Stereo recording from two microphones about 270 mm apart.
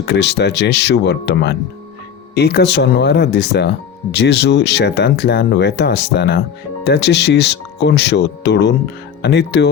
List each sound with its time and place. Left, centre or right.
0.1 s speech: left